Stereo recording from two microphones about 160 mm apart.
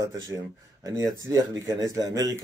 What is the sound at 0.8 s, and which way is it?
A man's voice, 20° right (ahead or behind).